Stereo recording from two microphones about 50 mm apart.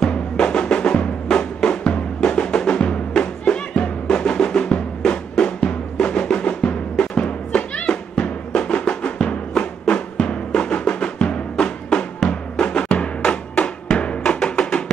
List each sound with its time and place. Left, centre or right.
0.0 s music: centre
5.3 s drum: centre
12.6 s music: left
13.9 s drum: left